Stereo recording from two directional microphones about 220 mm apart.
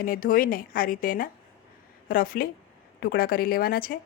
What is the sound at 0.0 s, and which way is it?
Speech, 40° left (ahead or behind).